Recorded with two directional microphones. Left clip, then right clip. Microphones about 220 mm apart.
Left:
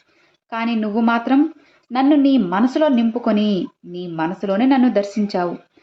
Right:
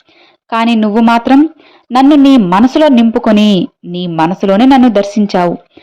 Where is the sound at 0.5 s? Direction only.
35° right (ahead or behind).